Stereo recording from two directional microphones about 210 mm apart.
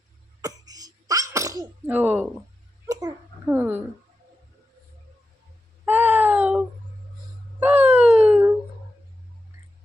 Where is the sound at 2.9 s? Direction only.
15° right (ahead or behind).